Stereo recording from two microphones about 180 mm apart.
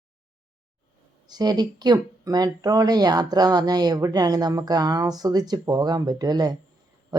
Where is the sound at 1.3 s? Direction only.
20° right (ahead or behind).